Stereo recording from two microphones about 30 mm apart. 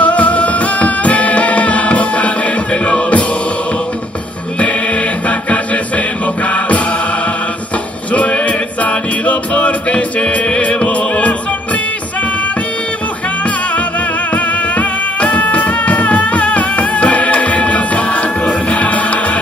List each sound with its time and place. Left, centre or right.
0.0 s music: left
4.6 s music: left
8.1 s music: left
8.8 s music: left
14.3 s music: left